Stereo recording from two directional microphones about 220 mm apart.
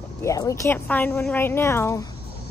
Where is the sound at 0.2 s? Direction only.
15° left (ahead or behind).